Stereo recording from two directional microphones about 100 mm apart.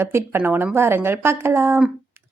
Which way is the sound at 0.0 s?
25° right (ahead or behind).